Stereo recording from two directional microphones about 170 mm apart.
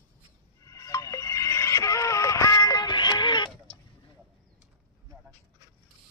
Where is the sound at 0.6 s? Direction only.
20° left (ahead or behind).